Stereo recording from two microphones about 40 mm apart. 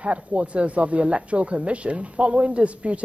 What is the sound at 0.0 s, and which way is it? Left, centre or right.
Speech, right.